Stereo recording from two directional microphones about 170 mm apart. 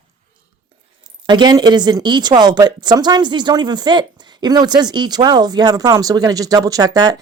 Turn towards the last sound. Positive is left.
turn(degrees=-20)  # may be behind; listen again after turning